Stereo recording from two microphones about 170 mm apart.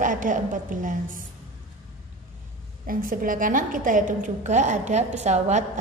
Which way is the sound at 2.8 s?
55° right (ahead or behind).